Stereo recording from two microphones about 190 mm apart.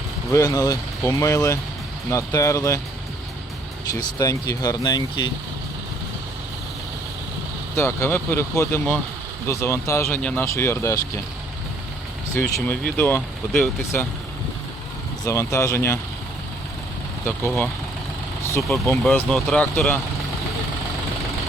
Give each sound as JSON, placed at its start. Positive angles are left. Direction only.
{"t": 0.3, "sound": "speech", "side_deg": 15}
{"t": 3.9, "sound": "speech", "side_deg": 20}
{"t": 7.8, "sound": "speech", "side_deg": 10}
{"t": 12.3, "sound": "speech", "side_deg": 15}
{"t": 15.2, "sound": "speech", "side_deg": 15}
{"t": 18.9, "sound": "speech", "side_deg": 5}